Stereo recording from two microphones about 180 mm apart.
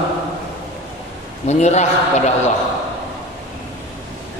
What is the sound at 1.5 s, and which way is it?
Speech, 40° left (ahead or behind).